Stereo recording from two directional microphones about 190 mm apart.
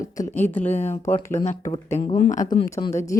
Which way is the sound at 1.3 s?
35° left (ahead or behind).